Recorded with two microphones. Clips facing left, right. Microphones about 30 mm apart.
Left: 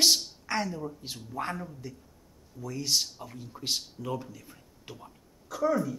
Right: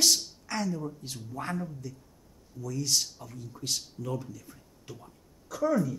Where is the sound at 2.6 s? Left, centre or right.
Left.